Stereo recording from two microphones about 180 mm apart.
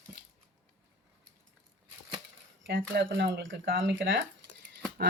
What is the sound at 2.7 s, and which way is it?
Speech, 80° right.